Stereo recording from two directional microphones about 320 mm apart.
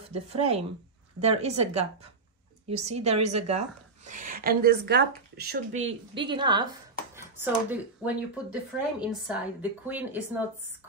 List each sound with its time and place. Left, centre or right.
0.1 s a woman's voice: centre
6.1 s a woman's voice: centre